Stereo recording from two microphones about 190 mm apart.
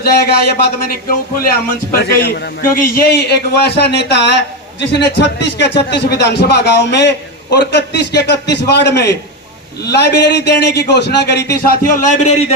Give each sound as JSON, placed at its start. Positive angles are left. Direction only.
{"t": 0.0, "sound": "a man's voice", "side_deg": 55}